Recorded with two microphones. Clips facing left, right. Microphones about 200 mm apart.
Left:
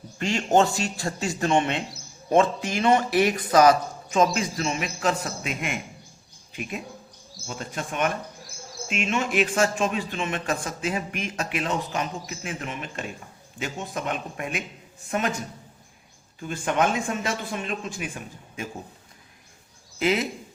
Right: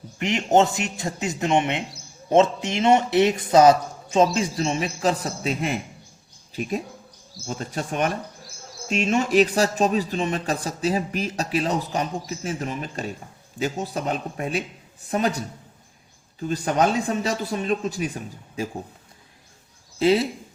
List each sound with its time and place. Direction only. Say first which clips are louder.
0.2 s a man's voice: right 2 dB; 20° right (ahead or behind); by 18.7 s 35° right (ahead or behind)
20.0 s a man's voice: right 5 dB; 30° right (ahead or behind)